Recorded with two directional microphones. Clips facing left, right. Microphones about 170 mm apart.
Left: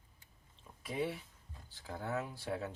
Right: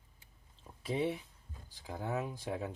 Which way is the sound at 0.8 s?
25° right (ahead or behind).